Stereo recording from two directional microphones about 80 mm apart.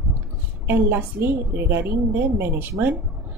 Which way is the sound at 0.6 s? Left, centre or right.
Right.